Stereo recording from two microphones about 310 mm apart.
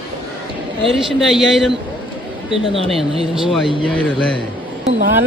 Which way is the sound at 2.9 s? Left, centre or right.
Centre.